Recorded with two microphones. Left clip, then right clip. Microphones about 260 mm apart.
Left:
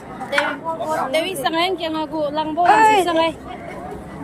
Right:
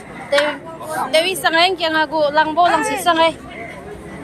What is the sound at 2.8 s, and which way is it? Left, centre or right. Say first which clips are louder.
Speech: left 8 dB; left.